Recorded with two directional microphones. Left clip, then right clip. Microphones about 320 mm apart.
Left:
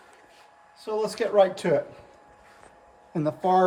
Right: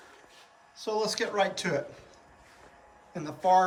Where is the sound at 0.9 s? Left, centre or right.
Centre.